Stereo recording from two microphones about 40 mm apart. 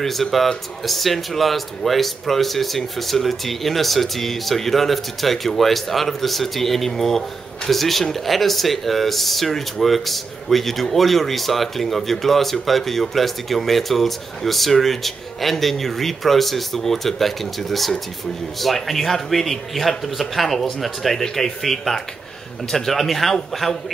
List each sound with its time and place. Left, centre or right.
0.0 s speech: centre